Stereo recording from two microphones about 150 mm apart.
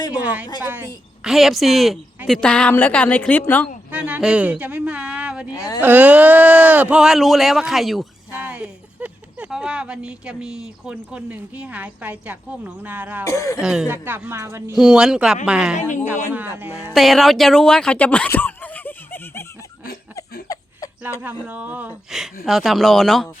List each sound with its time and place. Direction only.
0.1 s speech: 10° right (ahead or behind)
1.2 s a woman's voice: centre (ahead or behind)
3.9 s speech: 10° right (ahead or behind)
5.5 s speech: 25° left (ahead or behind)
5.8 s speech: 10° right (ahead or behind)
13.2 s speech: 20° left (ahead or behind)
13.6 s speech: 5° right (ahead or behind)
14.8 s speech: 5° right (ahead or behind)
16.9 s speech: centre (ahead or behind)
20.5 s a sound: 25° left (ahead or behind)
21.4 s speech: 10° right (ahead or behind)